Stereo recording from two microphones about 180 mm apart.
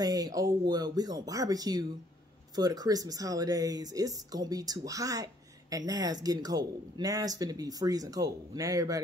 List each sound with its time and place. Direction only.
0.0 s speech: 20° right (ahead or behind)